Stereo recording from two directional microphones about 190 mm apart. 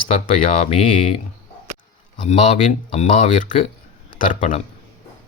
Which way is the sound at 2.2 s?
35° left (ahead or behind).